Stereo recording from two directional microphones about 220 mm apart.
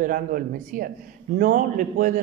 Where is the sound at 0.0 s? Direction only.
40° right (ahead or behind).